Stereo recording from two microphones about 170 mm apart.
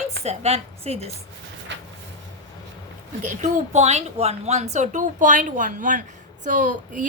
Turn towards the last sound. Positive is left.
turn(degrees=-50)  # may be behind; listen again after turning